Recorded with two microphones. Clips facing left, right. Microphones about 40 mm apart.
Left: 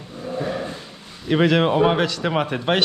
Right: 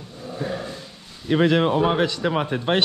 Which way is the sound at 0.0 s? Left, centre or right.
Left.